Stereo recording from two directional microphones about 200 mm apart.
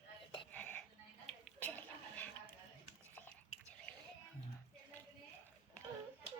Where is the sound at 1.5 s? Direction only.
10° left (ahead or behind).